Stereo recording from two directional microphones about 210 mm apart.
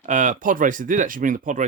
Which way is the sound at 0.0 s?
35° right (ahead or behind).